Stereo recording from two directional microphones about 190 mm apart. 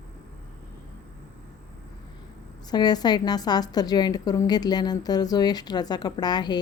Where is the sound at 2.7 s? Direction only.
20° left (ahead or behind).